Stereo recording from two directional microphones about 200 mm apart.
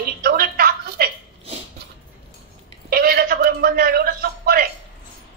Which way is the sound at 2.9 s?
50° right (ahead or behind).